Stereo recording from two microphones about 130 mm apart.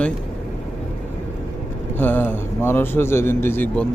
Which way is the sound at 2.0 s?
15° left (ahead or behind).